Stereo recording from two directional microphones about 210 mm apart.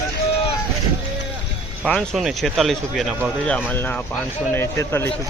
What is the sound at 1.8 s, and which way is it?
Speech, 5° left (ahead or behind).